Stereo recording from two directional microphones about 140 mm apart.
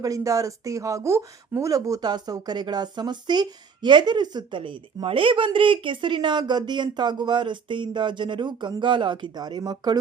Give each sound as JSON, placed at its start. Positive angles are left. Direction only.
{"t": 0.0, "sound": "speech", "side_deg": -25}